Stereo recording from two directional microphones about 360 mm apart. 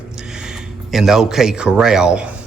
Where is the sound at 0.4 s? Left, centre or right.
Centre.